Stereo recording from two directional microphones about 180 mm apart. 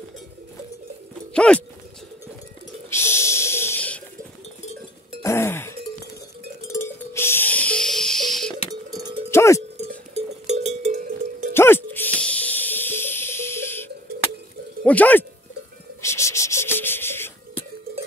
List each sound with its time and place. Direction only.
1.3 s speech: 5° left (ahead or behind)
2.9 s snort: 15° left (ahead or behind)
5.2 s music: 15° left (ahead or behind)
8.9 s cowbell: 25° right (ahead or behind)
9.3 s cowbell: 15° left (ahead or behind)
10.1 s cowbell: 40° right (ahead or behind)
11.5 s music: 10° left (ahead or behind)
14.8 s speech: 10° left (ahead or behind)
16.0 s rub: 15° left (ahead or behind)